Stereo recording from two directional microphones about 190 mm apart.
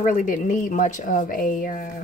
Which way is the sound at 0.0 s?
45° left (ahead or behind).